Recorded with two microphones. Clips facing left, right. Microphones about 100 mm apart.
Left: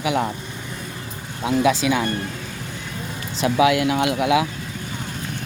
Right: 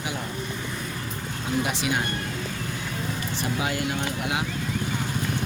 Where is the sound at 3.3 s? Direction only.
90° left.